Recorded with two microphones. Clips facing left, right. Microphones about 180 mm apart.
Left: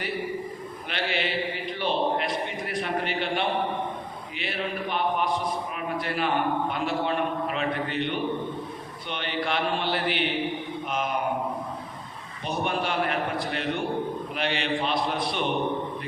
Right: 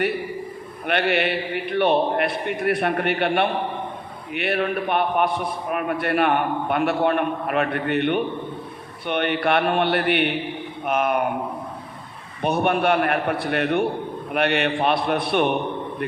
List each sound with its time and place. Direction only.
0.9 s a man's voice: 60° right (ahead or behind)
12.4 s a man's voice: 60° right (ahead or behind)